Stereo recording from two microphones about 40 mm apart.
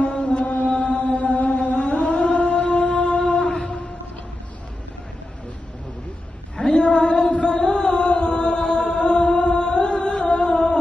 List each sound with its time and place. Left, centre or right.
0.0 s chant: left
6.5 s chant: left